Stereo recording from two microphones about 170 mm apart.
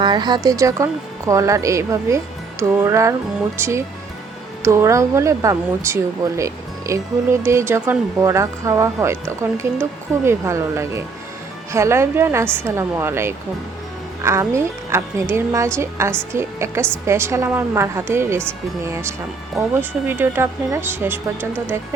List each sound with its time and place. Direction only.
0.0 s speech: 25° right (ahead or behind)